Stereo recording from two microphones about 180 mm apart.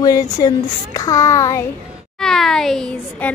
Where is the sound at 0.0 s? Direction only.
20° left (ahead or behind).